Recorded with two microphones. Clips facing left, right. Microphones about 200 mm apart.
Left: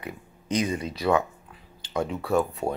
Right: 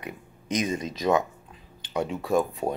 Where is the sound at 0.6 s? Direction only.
15° right (ahead or behind).